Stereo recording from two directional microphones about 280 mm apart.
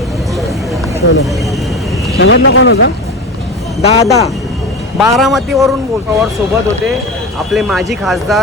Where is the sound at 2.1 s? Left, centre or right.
Left.